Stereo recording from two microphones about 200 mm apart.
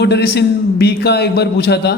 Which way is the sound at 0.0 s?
55° left (ahead or behind).